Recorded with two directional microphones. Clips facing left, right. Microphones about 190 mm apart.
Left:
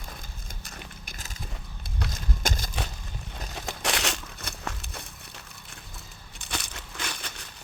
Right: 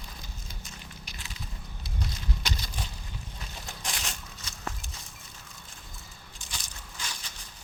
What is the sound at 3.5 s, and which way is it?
Crumpling, 75° left (ahead or behind).